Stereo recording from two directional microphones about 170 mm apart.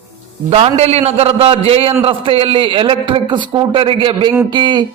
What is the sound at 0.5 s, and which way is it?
A man's voice, 40° right (ahead or behind).